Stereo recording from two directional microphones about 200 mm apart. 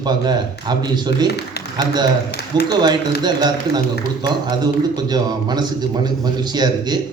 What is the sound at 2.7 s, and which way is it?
A man's voice, 20° right (ahead or behind).